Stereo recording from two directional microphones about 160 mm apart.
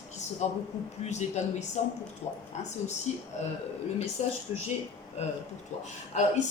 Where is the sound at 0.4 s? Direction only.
45° left (ahead or behind).